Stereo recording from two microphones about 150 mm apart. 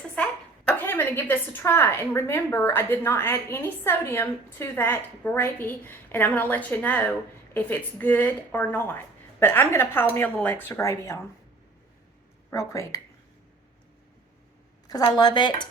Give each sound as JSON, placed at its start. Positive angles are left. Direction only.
{"t": 0.2, "sound": "a sound", "side_deg": 10}
{"t": 0.7, "sound": "a woman's voice", "side_deg": 15}
{"t": 12.5, "sound": "a woman's voice", "side_deg": 20}
{"t": 14.8, "sound": "a woman's voice", "side_deg": 25}